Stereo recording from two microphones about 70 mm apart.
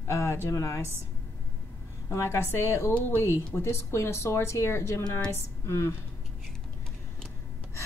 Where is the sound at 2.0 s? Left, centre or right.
Left.